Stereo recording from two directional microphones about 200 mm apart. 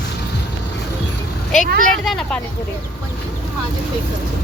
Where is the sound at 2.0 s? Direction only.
5° left (ahead or behind).